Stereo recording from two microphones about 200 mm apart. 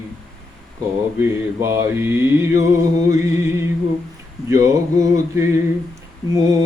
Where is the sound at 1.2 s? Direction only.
15° right (ahead or behind).